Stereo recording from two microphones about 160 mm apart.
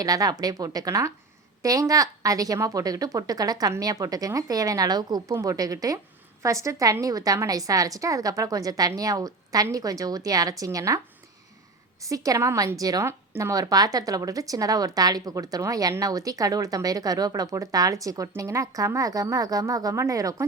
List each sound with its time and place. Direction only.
0.0 s a woman's voice: 25° right (ahead or behind)
12.0 s a woman's voice: 20° right (ahead or behind)